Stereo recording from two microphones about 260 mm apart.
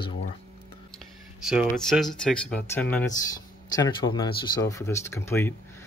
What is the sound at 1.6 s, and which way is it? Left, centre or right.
Speech, centre.